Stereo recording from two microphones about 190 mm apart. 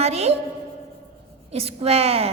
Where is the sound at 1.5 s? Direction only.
30° right (ahead or behind).